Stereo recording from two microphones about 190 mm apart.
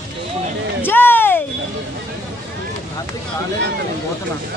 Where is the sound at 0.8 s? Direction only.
10° left (ahead or behind).